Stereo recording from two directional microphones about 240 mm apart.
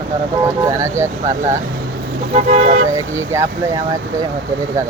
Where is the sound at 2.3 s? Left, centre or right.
Right.